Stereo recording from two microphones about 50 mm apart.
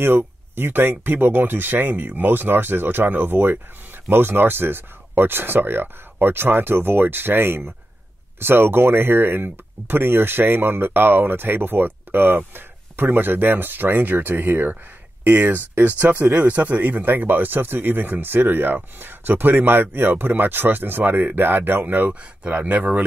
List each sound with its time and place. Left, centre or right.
0.0 s speech: right
22.4 s speech: right